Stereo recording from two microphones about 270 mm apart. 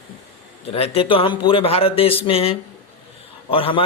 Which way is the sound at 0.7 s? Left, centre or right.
Left.